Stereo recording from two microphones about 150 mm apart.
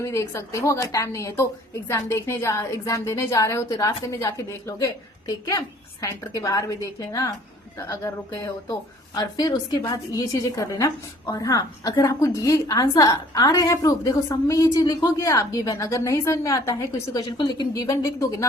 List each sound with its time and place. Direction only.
0.0 s a woman's voice: 20° left (ahead or behind)
8.7 s a woman's voice: 30° left (ahead or behind)